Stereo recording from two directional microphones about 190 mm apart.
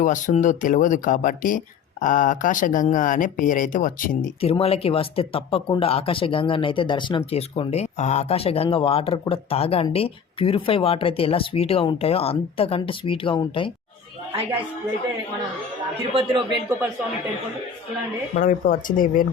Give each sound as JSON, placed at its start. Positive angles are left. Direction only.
{"t": 0.0, "sound": "speech", "side_deg": 40}
{"t": 4.4, "sound": "speech", "side_deg": 30}
{"t": 18.3, "sound": "speech", "side_deg": 45}